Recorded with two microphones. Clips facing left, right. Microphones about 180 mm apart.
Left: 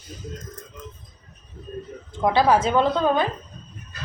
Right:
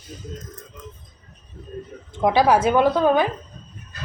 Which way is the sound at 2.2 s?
15° right (ahead or behind).